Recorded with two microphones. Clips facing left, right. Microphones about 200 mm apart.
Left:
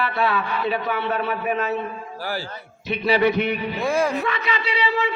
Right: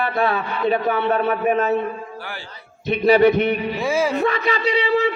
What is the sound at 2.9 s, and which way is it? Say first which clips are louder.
Speech: right 6 dB; 50° right (ahead or behind).